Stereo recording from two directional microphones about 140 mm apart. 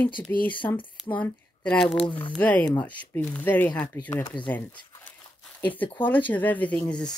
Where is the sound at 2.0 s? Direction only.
35° left (ahead or behind).